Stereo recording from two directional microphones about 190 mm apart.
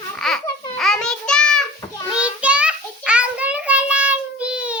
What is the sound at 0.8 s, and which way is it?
Child singing, 5° left (ahead or behind).